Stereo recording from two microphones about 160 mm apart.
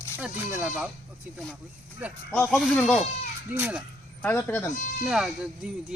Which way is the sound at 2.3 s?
5° left (ahead or behind).